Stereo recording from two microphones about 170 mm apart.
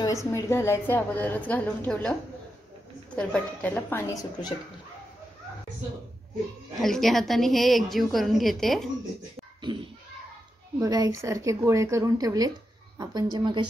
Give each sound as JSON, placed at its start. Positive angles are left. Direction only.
{"t": 0.0, "sound": "a woman's voice", "side_deg": 20}
{"t": 3.2, "sound": "a woman's voice", "side_deg": 5}
{"t": 6.8, "sound": "a woman's voice", "side_deg": 0}
{"t": 9.6, "sound": "a sound", "side_deg": -25}
{"t": 10.8, "sound": "speech", "side_deg": -20}